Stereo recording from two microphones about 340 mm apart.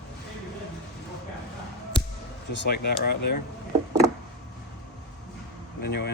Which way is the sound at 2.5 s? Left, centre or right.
Left.